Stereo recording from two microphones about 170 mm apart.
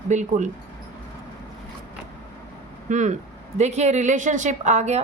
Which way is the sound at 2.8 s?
45° right (ahead or behind).